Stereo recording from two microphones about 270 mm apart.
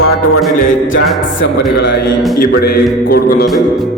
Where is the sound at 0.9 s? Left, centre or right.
Left.